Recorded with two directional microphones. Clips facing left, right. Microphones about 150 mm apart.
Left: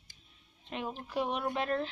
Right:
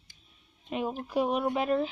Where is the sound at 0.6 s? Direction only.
10° right (ahead or behind).